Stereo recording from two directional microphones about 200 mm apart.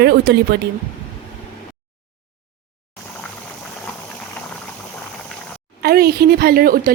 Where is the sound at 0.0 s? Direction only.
55° right (ahead or behind).